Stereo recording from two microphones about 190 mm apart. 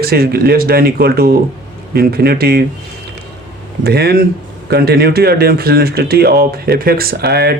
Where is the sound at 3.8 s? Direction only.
55° right (ahead or behind).